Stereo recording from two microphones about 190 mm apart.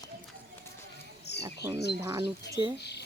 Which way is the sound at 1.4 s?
15° right (ahead or behind).